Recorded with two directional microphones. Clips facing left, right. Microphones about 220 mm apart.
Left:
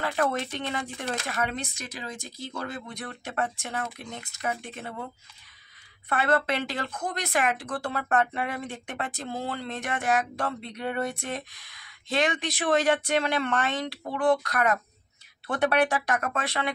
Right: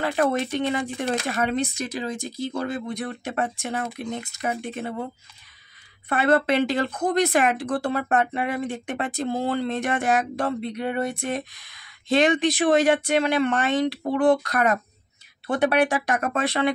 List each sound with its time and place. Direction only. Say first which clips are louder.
0.0 s speech: right 5 dB; 15° right (ahead or behind)
6.0 s speech: right 5 dB; 20° right (ahead or behind)
10.6 s speech: right 4 dB; 5° right (ahead or behind)
12.1 s speech: right 8 dB; 25° right (ahead or behind)
14.1 s speech: right 4 dB; 25° right (ahead or behind)
15.4 s speech: right 3 dB; 10° right (ahead or behind)
16.2 s speech: right 7 dB; 25° right (ahead or behind)